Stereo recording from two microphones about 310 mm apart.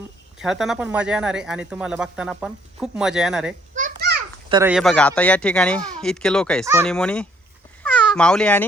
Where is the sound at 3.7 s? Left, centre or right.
Right.